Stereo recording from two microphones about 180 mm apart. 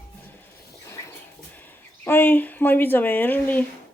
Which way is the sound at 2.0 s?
10° left (ahead or behind).